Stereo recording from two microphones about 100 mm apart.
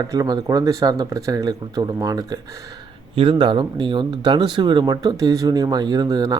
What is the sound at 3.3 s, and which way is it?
Speech, 50° right (ahead or behind).